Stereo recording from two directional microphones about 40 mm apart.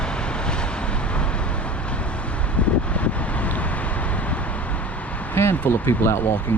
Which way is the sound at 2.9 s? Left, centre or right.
Left.